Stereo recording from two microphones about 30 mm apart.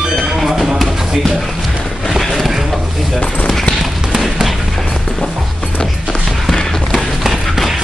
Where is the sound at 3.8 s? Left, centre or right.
Centre.